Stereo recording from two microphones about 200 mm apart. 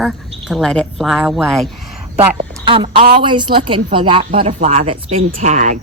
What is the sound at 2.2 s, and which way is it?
A woman's voice, 25° right (ahead or behind).